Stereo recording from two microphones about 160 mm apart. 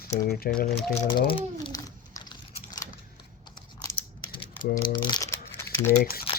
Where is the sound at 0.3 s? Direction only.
70° left (ahead or behind).